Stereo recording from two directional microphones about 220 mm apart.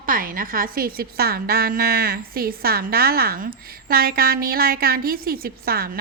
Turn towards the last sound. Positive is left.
turn(degrees=-45)  # may be behind; listen again after turning